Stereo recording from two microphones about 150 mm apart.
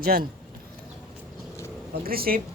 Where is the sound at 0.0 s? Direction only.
85° right.